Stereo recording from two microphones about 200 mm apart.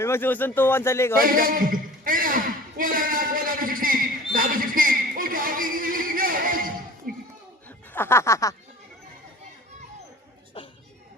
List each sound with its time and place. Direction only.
0.0 s speech: 10° left (ahead or behind)
1.2 s a sound: 45° right (ahead or behind)
7.9 s speech: 10° left (ahead or behind)